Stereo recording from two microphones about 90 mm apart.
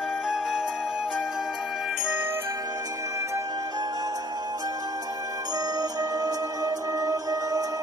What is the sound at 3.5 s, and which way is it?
Music, 50° right (ahead or behind).